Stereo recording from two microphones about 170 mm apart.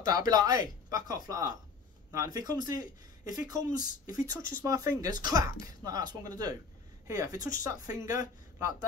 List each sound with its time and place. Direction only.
0.0 s speech: 20° right (ahead or behind)